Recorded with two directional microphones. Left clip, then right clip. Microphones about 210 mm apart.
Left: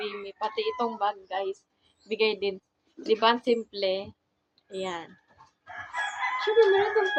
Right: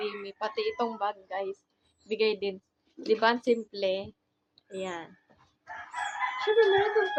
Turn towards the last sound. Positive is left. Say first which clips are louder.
# left 2 dB
turn(degrees=0)  # may be behind; listen again after turning